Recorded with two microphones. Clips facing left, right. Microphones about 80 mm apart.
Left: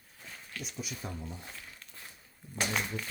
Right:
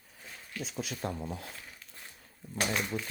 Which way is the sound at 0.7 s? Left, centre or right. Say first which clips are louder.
Right 6 dB; right.